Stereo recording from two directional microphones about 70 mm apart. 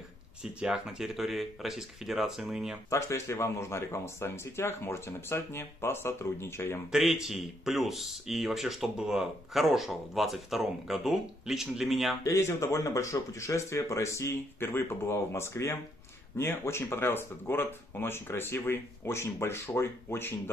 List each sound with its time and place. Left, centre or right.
0.4 s speech: centre
2.9 s speech: left
6.9 s speech: centre
12.2 s speech: left